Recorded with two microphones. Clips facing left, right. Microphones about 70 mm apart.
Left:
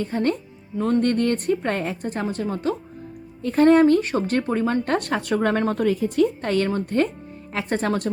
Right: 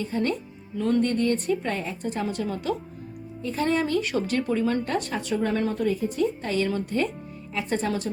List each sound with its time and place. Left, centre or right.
0.0 s a woman's voice: left
1.0 s speech: left
2.0 s a woman's voice: left
3.4 s speech: left
4.9 s speech: left
6.4 s speech: left